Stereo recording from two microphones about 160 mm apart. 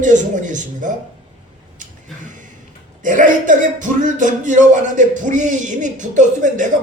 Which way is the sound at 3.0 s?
55° right (ahead or behind).